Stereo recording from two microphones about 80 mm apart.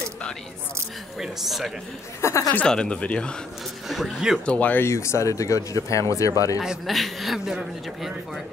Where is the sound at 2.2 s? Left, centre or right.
Left.